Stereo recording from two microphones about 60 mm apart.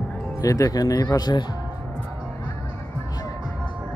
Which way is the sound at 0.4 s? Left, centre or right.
Left.